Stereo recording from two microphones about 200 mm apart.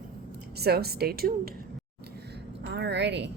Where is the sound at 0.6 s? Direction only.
50° right (ahead or behind).